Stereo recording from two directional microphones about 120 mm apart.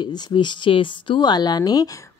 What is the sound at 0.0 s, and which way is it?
Speech, 40° left (ahead or behind).